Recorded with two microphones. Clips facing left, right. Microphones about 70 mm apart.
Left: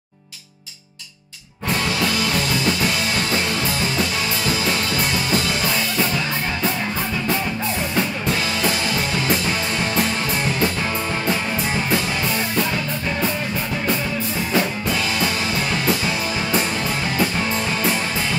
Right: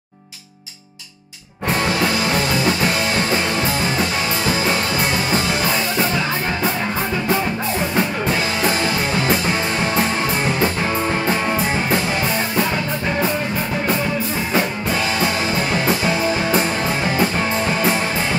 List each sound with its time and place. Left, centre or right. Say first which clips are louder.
1.7 s music: right 3 dB; right
7.9 s music: right 2 dB; right
14.5 s music: right 1 dB; right
17.2 s music: right 3 dB; right